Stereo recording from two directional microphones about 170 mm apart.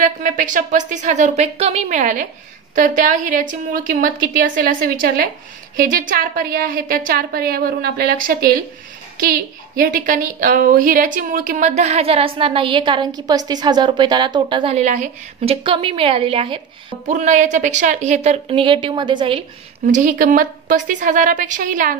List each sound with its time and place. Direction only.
0.0 s a woman's voice: 50° right (ahead or behind); by 16.6 s 30° right (ahead or behind)
17.1 s a woman's voice: 45° right (ahead or behind); by 19.4 s 30° right (ahead or behind)
19.9 s a woman's voice: 50° right (ahead or behind)